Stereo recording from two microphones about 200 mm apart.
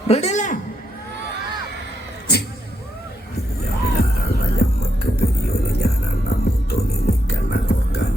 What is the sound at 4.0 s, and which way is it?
Music, 50° left (ahead or behind).